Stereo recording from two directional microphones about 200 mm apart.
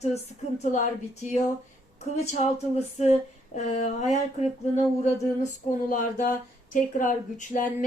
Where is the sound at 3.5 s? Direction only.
35° left (ahead or behind).